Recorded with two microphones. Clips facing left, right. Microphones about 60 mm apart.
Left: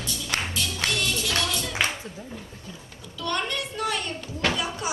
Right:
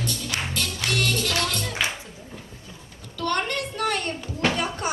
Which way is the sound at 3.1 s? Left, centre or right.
Right.